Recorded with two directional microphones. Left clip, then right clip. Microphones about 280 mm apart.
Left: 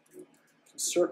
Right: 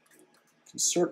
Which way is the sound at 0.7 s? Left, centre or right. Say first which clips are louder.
Even; right.